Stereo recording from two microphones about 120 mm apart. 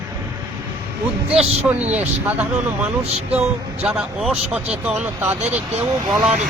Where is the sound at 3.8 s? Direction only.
5° right (ahead or behind).